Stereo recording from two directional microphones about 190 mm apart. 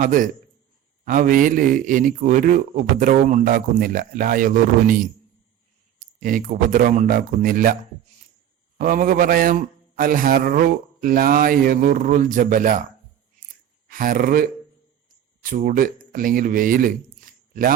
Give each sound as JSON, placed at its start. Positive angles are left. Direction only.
{"t": 0.0, "sound": "a man's voice", "side_deg": -45}
{"t": 6.1, "sound": "a man's voice", "side_deg": -45}
{"t": 8.8, "sound": "a man's voice", "side_deg": -45}
{"t": 13.8, "sound": "speech", "side_deg": -50}